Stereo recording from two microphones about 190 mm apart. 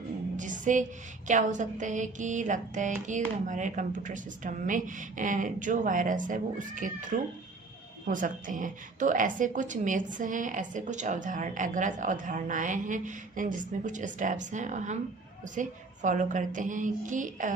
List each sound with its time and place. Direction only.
0.3 s music: 40° right (ahead or behind)
1.3 s a woman's voice: 40° right (ahead or behind)